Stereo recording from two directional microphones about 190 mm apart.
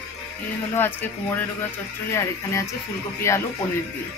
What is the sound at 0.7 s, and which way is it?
Speech, 10° left (ahead or behind).